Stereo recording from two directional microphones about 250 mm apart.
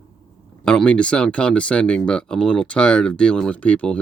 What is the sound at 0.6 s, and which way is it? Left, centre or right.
Speech, centre.